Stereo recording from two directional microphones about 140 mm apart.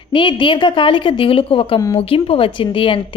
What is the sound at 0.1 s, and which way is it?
A woman's voice, 35° left (ahead or behind).